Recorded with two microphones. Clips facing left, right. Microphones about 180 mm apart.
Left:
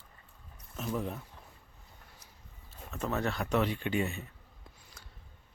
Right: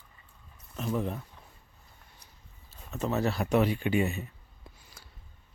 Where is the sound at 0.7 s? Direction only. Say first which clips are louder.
Right 4 dB; centre (ahead or behind).